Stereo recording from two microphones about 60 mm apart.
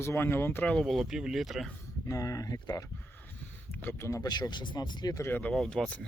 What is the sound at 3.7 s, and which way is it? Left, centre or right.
Speech, left.